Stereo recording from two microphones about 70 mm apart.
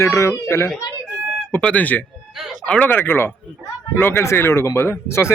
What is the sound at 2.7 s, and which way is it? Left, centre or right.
Speech, left.